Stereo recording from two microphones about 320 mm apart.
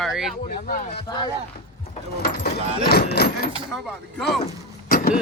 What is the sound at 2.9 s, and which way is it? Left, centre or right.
Speech, left.